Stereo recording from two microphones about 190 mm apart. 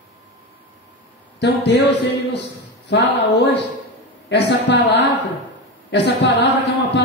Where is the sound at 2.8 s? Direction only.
70° left (ahead or behind).